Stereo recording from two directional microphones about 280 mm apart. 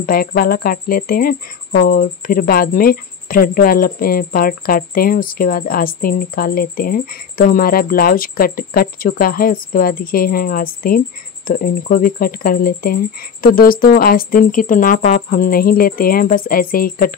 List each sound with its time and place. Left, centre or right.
0.0 s speech: left